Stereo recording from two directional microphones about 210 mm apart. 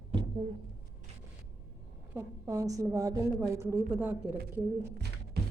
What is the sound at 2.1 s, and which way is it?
A woman's voice, 15° right (ahead or behind).